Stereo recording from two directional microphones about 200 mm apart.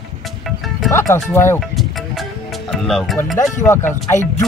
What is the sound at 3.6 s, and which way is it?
Speech, 10° left (ahead or behind).